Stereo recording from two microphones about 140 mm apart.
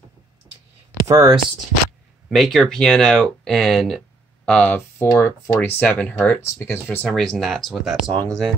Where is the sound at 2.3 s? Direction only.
Centre (ahead or behind).